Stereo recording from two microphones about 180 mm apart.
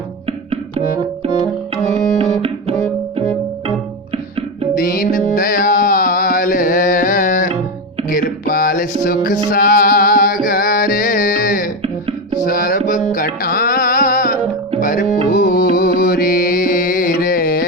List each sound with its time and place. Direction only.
0.3 s music: 35° right (ahead or behind)
4.1 s music: 30° right (ahead or behind)
4.8 s music: 50° left (ahead or behind)